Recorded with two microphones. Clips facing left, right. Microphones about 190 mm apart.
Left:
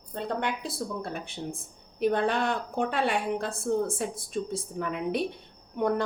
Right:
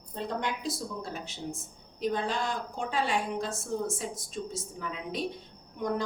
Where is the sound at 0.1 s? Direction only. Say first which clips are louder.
Left 2 dB; 60° left (ahead or behind).